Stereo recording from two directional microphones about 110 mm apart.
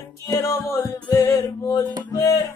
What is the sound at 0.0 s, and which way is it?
Music, 30° left (ahead or behind).